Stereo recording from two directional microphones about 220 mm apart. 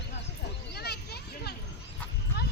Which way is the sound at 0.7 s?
45° left (ahead or behind).